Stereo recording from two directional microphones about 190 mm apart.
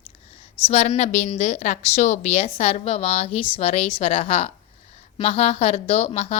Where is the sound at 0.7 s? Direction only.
35° left (ahead or behind).